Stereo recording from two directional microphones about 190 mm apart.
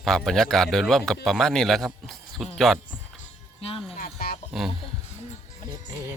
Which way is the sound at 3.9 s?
55° left (ahead or behind).